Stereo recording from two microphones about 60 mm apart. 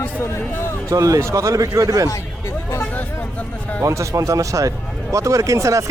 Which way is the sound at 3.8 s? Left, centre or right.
Right.